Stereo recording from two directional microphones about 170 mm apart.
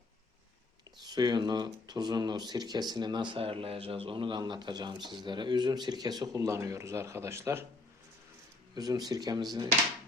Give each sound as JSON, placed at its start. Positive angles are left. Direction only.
{"t": 1.0, "sound": "a man's voice", "side_deg": -25}
{"t": 8.7, "sound": "a man's voice", "side_deg": -25}